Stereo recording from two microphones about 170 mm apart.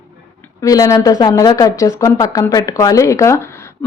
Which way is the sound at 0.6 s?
20° left (ahead or behind).